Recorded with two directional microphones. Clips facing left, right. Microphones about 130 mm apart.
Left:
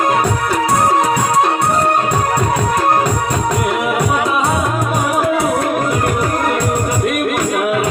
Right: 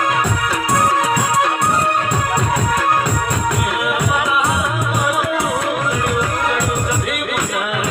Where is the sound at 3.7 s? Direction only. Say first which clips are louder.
Left 3 dB; 35° left (ahead or behind).